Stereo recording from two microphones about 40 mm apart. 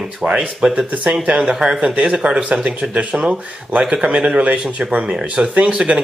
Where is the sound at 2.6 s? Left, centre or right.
Right.